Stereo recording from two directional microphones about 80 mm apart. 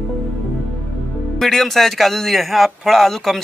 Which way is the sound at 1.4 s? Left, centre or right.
Centre.